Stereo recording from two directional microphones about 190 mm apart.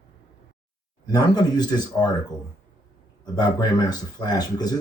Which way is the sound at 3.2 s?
20° left (ahead or behind).